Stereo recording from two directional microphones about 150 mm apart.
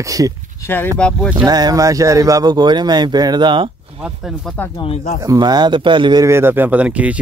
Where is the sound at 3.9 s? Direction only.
5° right (ahead or behind).